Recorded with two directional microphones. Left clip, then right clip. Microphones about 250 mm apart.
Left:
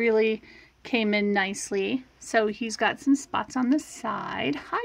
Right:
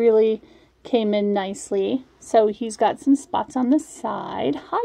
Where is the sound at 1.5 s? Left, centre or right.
Centre.